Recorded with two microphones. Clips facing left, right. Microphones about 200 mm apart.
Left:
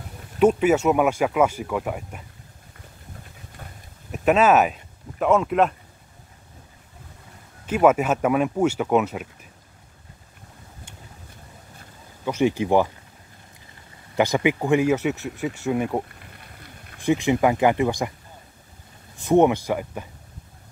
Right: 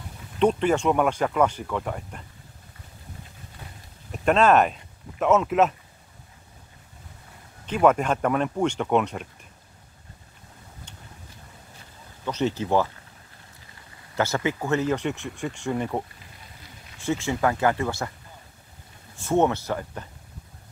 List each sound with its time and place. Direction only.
0.4 s speech: 5° left (ahead or behind)
4.1 s speech: 5° left (ahead or behind)
7.6 s speech: 5° left (ahead or behind)
12.3 s speech: 10° left (ahead or behind)
14.1 s speech: 15° left (ahead or behind)
16.2 s a sound: 60° left (ahead or behind)
17.0 s speech: 15° left (ahead or behind)
19.1 s speech: 15° left (ahead or behind)